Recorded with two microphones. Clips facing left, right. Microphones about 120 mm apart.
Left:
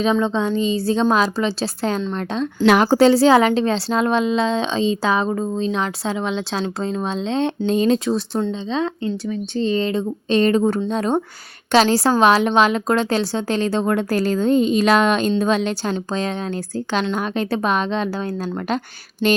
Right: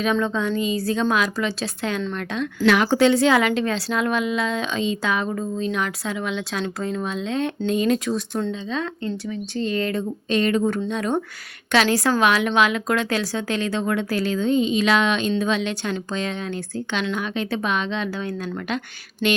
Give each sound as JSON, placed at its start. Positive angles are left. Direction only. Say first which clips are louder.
{"t": 0.0, "sound": "a woman's voice", "louder": "left 3 dB", "side_deg": 25}